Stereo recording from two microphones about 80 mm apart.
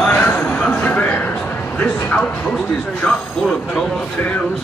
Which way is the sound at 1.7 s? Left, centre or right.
Left.